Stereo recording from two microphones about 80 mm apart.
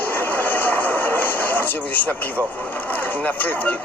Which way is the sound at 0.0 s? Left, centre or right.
Left.